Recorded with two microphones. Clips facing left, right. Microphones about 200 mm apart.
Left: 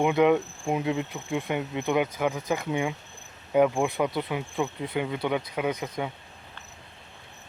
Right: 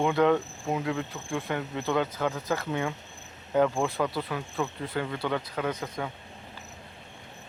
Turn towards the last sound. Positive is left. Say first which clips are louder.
# left 2 dB
turn(degrees=15)  # may be behind; listen again after turning